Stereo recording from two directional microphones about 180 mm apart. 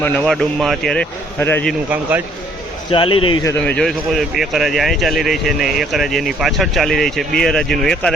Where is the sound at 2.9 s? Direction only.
30° left (ahead or behind).